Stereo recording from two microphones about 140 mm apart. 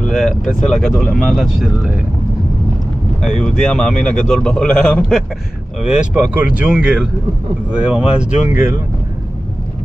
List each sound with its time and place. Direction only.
0.0 s a man's voice: 5° left (ahead or behind)
3.2 s a man's voice: 5° left (ahead or behind)
5.8 s speech: 5° right (ahead or behind)